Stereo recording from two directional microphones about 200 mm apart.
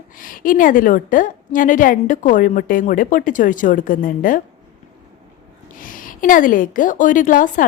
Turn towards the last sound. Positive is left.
turn(degrees=40)  # may be behind; listen again after turning